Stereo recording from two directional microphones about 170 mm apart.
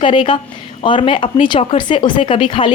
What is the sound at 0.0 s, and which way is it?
Speech, 30° left (ahead or behind).